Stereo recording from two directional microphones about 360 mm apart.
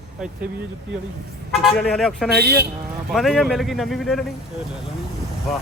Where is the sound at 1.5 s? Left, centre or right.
Centre.